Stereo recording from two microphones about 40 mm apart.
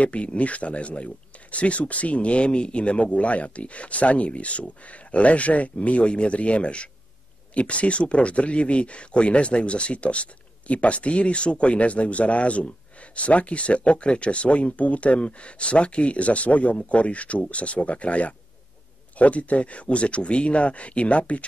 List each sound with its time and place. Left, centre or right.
0.0 s speech: left